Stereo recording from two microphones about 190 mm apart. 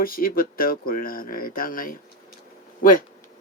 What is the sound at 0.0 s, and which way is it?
Speech, 50° left (ahead or behind).